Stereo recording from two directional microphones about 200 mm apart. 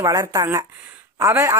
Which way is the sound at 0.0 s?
20° right (ahead or behind).